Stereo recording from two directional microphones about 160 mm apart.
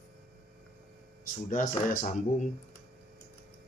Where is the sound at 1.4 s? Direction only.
55° left (ahead or behind).